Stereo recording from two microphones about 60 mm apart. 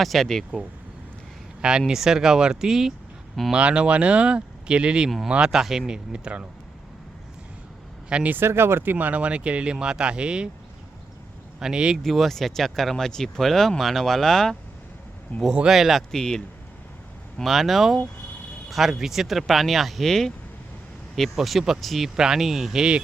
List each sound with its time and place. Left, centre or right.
0.0 s speech: centre
1.9 s speech: centre
8.1 s speech: right
8.4 s speech: right; by 10.5 s centre
11.6 s speech: centre
12.0 s speech: centre
15.3 s speech: left
15.7 s speech: centre
16.1 s speech: centre
17.3 s speech: centre
21.3 s speech: centre